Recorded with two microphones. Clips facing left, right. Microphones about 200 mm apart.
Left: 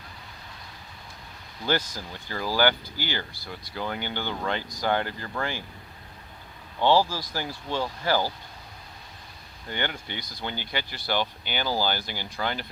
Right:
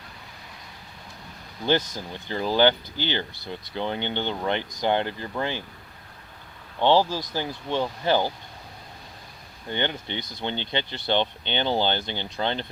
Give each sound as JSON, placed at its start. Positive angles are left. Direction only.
{"t": 1.6, "sound": "speech", "side_deg": -20}
{"t": 6.7, "sound": "speech", "side_deg": -20}
{"t": 9.6, "sound": "speech", "side_deg": -20}